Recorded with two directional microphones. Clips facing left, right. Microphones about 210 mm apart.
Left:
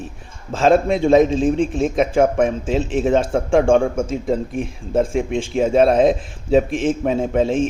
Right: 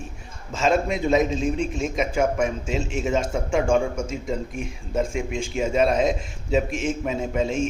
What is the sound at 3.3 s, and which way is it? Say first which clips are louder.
A man's voice: left 6 dB; 50° left (ahead or behind).